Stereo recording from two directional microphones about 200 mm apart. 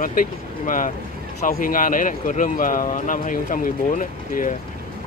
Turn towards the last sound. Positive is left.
turn(degrees=40)  # may be behind; listen again after turning